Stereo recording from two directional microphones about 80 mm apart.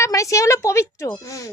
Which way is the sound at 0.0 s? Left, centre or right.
Left.